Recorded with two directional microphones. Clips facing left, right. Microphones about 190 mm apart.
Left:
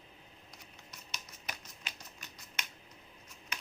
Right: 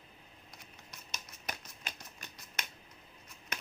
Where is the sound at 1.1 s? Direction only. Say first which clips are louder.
Right 3 dB; 50° right (ahead or behind).